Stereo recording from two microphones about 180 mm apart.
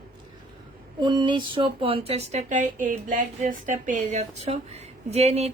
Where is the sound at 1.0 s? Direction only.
25° right (ahead or behind).